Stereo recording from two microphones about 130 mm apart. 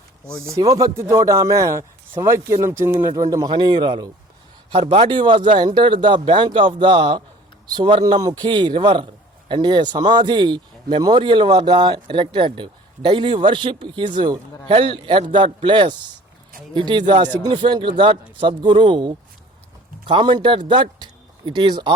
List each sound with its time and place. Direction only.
0.4 s speech: 25° right (ahead or behind)